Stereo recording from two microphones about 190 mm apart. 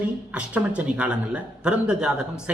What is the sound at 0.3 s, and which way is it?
A man's voice, 5° right (ahead or behind).